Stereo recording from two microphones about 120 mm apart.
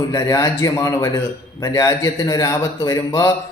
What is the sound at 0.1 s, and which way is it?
A man's voice, 30° left (ahead or behind).